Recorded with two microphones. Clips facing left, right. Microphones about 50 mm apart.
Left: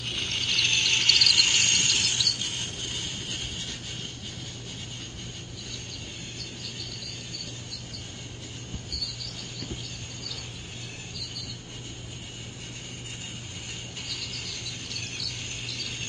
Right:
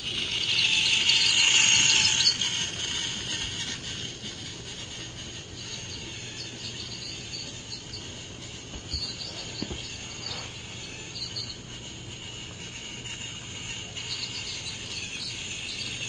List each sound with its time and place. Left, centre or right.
0.1 s a sound: centre
1.3 s mechanisms: right
14.1 s mechanisms: centre